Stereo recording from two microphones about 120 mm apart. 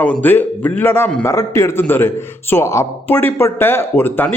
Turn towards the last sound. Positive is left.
turn(degrees=15)  # may be behind; listen again after turning